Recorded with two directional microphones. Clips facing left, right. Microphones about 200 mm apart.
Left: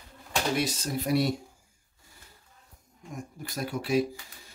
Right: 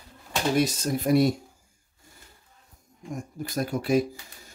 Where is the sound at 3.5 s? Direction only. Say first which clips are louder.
Right 3 dB; 45° right (ahead or behind).